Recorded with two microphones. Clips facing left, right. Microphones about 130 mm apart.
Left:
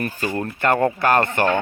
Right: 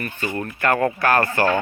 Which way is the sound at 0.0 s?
40° left (ahead or behind).